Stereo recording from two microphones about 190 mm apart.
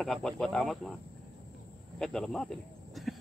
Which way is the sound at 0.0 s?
5° left (ahead or behind).